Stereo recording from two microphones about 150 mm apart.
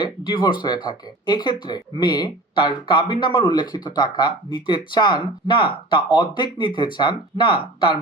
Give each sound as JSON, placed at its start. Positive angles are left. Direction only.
{"t": 0.0, "sound": "speech", "side_deg": 30}